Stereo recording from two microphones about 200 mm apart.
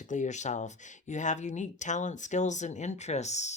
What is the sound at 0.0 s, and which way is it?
Speech, 40° left (ahead or behind).